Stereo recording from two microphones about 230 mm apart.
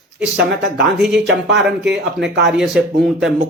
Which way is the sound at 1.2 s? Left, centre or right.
Right.